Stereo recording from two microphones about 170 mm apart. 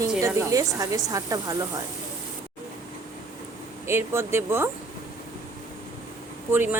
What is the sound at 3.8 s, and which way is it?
Speech, 15° right (ahead or behind).